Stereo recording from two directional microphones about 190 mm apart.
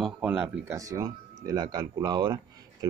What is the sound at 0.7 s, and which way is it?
Speech, 15° right (ahead or behind).